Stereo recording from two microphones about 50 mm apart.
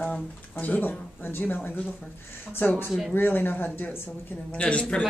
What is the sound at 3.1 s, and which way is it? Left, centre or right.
Speech, left.